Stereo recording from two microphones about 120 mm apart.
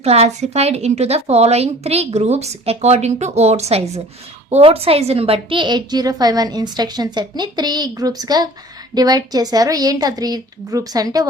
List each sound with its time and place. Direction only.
0.0 s a woman's voice: 65° right (ahead or behind); by 11.3 s 30° right (ahead or behind)